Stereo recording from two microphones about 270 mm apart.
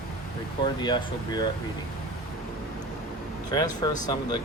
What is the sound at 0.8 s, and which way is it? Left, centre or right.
Speech, centre.